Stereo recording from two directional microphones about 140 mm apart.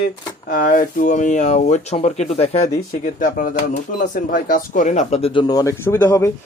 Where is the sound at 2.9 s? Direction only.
75° left (ahead or behind); by 5.3 s 50° left (ahead or behind).